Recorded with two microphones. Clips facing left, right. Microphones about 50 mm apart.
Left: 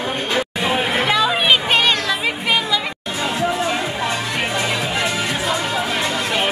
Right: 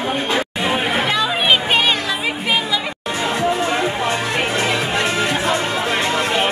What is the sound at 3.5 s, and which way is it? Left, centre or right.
Music, right.